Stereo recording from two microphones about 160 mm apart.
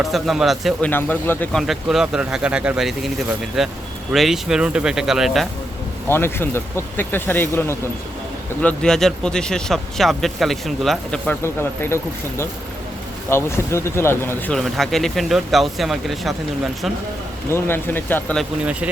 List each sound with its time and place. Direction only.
0.0 s speech: centre (ahead or behind)
0.9 s speech: 10° left (ahead or behind)
1.6 s speech: centre (ahead or behind)
6.1 s speech: 15° left (ahead or behind)
8.6 s speech: 5° left (ahead or behind)
11.3 s speech: 15° left (ahead or behind)
13.3 s speech: 15° left (ahead or behind)
14.5 s speech: centre (ahead or behind)
17.5 s speech: 15° left (ahead or behind)
18.6 s speech: 10° right (ahead or behind)